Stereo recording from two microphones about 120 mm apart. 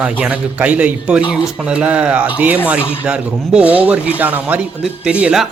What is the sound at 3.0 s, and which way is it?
Speech, 10° right (ahead or behind).